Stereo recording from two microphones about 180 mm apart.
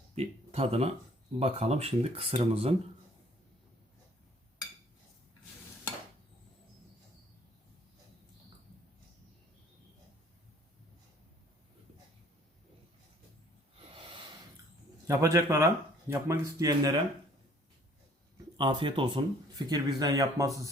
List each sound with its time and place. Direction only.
0.2 s speech: 35° right (ahead or behind)
15.0 s speech: 15° right (ahead or behind)
18.5 s speech: 25° right (ahead or behind)